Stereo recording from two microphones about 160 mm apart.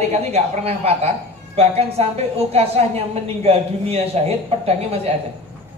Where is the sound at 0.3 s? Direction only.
40° right (ahead or behind).